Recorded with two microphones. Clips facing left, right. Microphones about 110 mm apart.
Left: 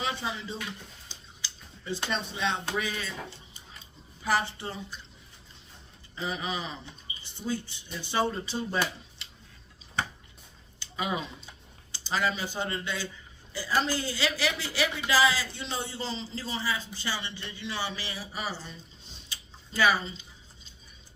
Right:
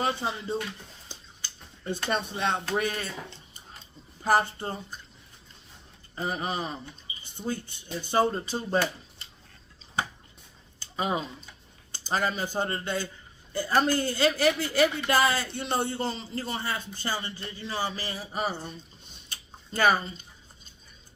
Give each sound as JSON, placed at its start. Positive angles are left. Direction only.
{"t": 0.0, "sound": "speech", "side_deg": -50}
{"t": 1.0, "sound": "a sound", "side_deg": -50}
{"t": 2.0, "sound": "a woman's voice", "side_deg": -50}
{"t": 4.2, "sound": "a woman's voice", "side_deg": -45}
{"t": 6.1, "sound": "a woman's voice", "side_deg": -45}
{"t": 10.8, "sound": "speech", "side_deg": -35}
{"t": 11.9, "sound": "a woman's voice", "side_deg": -50}
{"t": 19.3, "sound": "a sound", "side_deg": -50}